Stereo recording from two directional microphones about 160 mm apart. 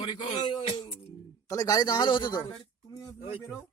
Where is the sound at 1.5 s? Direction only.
25° left (ahead or behind).